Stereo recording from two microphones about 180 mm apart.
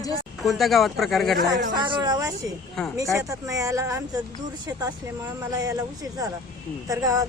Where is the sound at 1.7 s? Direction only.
25° right (ahead or behind).